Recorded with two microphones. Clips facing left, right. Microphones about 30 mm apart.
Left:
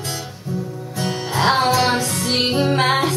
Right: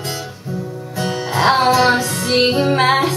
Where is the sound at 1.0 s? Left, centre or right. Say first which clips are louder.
Right 3 dB; centre.